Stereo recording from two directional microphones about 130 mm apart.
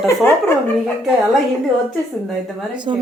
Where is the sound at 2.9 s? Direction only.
45° right (ahead or behind).